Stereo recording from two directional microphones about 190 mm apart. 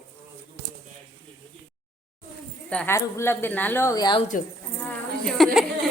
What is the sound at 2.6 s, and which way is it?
Speech, 10° left (ahead or behind).